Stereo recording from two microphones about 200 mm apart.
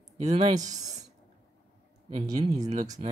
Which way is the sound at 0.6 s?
20° right (ahead or behind).